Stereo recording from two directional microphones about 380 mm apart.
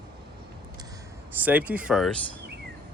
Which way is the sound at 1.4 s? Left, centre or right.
Centre.